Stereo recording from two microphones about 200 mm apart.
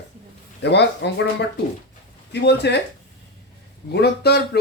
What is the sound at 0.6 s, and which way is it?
Speech, 55° left (ahead or behind).